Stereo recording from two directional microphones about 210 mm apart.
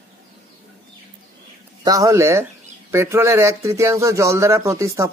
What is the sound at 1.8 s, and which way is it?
Speech, 15° right (ahead or behind).